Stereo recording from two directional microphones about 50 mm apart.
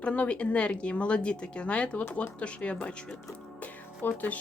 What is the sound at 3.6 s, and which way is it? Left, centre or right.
Music, left.